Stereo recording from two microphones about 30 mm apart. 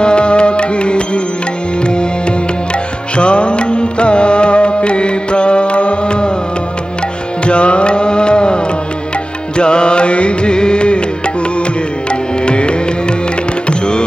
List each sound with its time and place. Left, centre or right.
0.0 s music: left
3.2 s music: left
7.4 s music: left
12.5 s music: left